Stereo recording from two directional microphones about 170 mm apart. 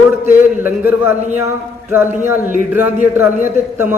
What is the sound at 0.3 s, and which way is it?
A man's voice, 10° right (ahead or behind).